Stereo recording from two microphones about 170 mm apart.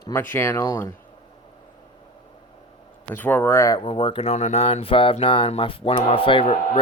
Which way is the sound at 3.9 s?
30° left (ahead or behind).